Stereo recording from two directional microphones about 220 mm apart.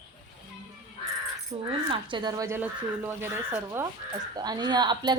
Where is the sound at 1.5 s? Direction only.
20° right (ahead or behind).